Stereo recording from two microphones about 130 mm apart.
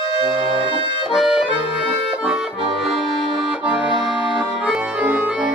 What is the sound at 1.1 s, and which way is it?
Accordion, 5° right (ahead or behind).